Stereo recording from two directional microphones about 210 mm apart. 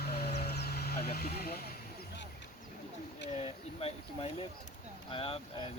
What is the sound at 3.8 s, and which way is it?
Speech, 30° left (ahead or behind).